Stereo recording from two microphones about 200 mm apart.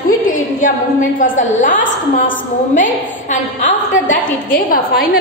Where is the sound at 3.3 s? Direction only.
40° left (ahead or behind).